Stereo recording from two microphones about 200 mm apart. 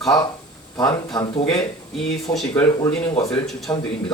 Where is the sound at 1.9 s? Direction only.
Centre (ahead or behind).